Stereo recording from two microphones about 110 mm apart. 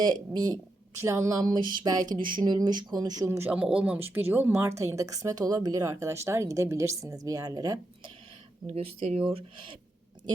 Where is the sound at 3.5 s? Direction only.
10° right (ahead or behind); by 7.8 s 35° right (ahead or behind).